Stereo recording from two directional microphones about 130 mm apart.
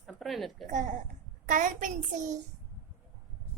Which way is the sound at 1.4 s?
85° right.